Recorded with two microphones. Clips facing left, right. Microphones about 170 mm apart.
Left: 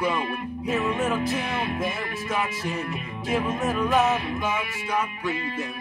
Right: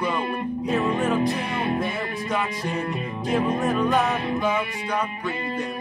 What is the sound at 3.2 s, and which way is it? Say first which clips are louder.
Music: right 3 dB; 5° left (ahead or behind).